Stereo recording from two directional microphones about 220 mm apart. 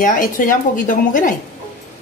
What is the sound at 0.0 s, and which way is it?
Speech, 40° left (ahead or behind).